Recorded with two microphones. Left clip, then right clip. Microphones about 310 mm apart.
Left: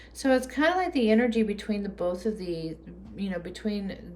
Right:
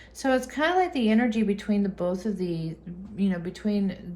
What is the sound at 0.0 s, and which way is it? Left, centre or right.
A woman's voice, centre.